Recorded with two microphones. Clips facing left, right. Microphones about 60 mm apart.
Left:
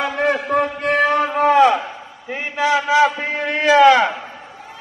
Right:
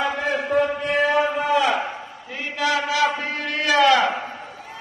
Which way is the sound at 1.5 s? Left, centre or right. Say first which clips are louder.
Left 6 dB; left.